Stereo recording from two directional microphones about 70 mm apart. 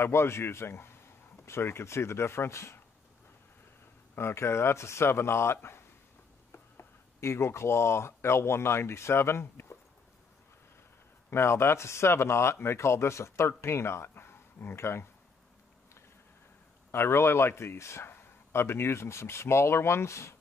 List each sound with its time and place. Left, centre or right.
0.0 s speech: left
4.1 s speech: left
11.2 s speech: left
16.9 s speech: left